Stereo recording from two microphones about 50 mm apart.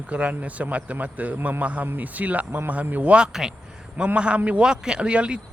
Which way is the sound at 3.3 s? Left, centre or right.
Centre.